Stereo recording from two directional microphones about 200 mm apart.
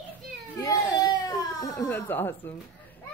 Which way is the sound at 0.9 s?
20° left (ahead or behind).